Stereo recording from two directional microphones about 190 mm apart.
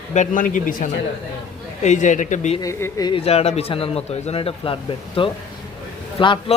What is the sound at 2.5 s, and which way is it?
A man's voice, 20° left (ahead or behind).